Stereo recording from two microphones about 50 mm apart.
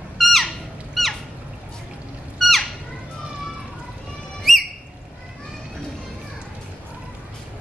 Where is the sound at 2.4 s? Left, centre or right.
Centre.